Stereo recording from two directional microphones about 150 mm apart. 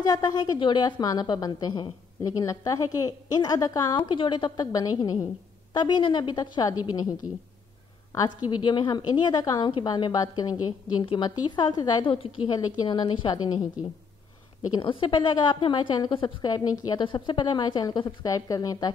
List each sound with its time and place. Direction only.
0.0 s a woman's voice: 25° left (ahead or behind)
14.7 s a woman's voice: 35° left (ahead or behind)